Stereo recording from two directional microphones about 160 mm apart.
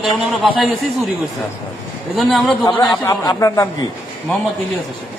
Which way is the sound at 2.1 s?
Centre (ahead or behind).